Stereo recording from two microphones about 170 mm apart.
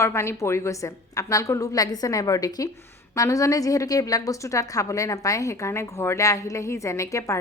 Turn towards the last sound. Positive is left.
turn(degrees=15)  # may be behind; listen again after turning